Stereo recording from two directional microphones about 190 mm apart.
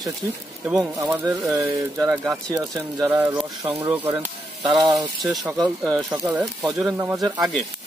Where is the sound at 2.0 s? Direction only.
15° right (ahead or behind).